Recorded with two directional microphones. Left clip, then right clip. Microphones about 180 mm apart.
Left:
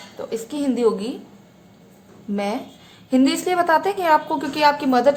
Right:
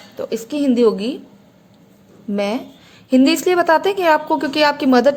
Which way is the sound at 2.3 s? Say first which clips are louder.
Right 4 dB; 30° right (ahead or behind).